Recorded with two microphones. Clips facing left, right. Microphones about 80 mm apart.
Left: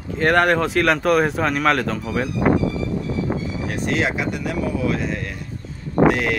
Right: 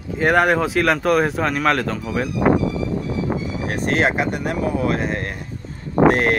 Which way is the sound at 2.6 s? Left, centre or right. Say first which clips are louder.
Right 1 dB; centre.